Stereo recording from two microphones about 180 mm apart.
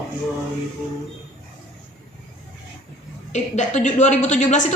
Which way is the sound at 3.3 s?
40° left (ahead or behind).